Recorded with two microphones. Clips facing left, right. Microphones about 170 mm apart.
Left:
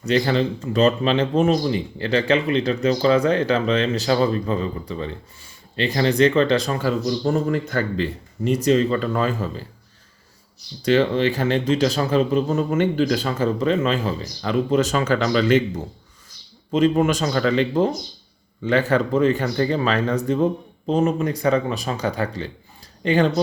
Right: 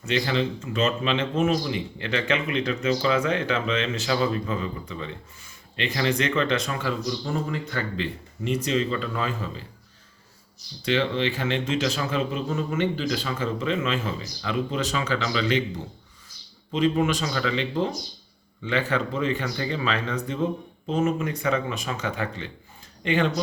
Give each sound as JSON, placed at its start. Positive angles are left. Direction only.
{"t": 0.0, "sound": "speech", "side_deg": 40}
{"t": 10.8, "sound": "speech", "side_deg": 40}
{"t": 16.7, "sound": "speech", "side_deg": 45}